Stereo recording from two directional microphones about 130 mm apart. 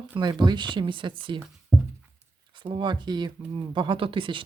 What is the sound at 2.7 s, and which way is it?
Speech, 35° right (ahead or behind).